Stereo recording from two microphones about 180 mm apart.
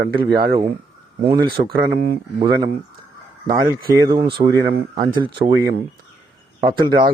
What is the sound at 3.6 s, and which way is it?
Speech, 20° right (ahead or behind).